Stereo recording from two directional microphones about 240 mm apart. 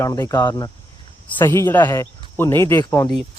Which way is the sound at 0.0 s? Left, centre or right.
Centre.